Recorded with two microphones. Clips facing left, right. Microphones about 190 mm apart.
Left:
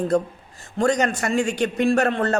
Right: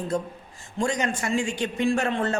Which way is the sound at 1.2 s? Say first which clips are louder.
Left 4 dB; 70° left (ahead or behind).